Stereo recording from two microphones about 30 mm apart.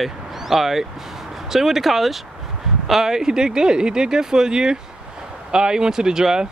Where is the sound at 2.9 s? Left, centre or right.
Centre.